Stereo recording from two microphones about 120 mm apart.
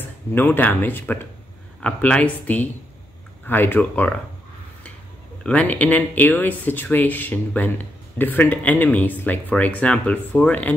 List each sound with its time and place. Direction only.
0.0 s speech: 15° left (ahead or behind)
5.4 s speech: 10° left (ahead or behind)